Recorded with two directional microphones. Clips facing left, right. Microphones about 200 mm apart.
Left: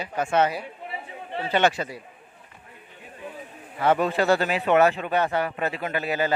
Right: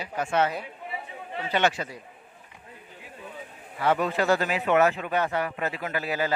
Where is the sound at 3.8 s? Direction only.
30° left (ahead or behind).